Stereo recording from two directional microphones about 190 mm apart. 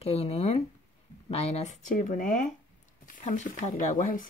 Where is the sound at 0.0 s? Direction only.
30° left (ahead or behind).